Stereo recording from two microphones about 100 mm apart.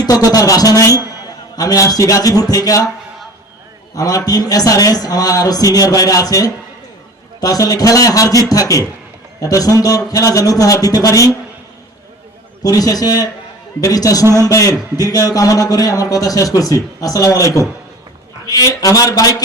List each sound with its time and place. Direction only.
0.0 s speech: 40° left (ahead or behind)
3.9 s a man's voice: 35° left (ahead or behind)
12.6 s speech: 40° left (ahead or behind)